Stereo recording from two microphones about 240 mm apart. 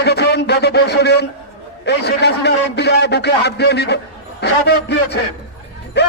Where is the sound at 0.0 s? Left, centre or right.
Left.